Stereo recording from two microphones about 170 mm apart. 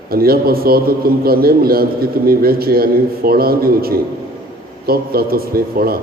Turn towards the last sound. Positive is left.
turn(degrees=-60)  # may be behind; listen again after turning